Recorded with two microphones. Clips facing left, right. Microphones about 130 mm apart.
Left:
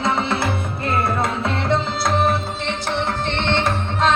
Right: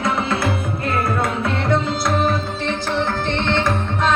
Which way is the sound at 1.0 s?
25° left (ahead or behind).